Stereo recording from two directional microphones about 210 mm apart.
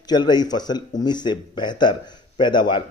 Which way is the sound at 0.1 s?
20° left (ahead or behind).